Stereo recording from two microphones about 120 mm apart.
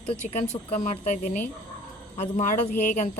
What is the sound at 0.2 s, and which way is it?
Speech, 75° left (ahead or behind).